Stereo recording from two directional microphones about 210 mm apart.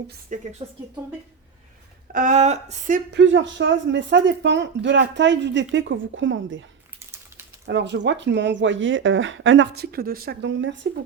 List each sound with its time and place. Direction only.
0.3 s speech: 40° right (ahead or behind)
2.1 s speech: 35° right (ahead or behind)
3.1 s speech: 60° right (ahead or behind)
7.7 s speech: 55° right (ahead or behind)